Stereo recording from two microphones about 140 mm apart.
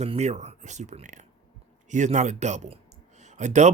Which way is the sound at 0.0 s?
50° right (ahead or behind).